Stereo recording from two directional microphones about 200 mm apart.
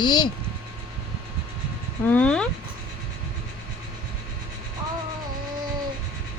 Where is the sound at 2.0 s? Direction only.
5° left (ahead or behind).